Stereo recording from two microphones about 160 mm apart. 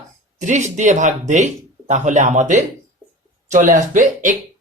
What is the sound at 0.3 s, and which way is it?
Speech, 50° right (ahead or behind).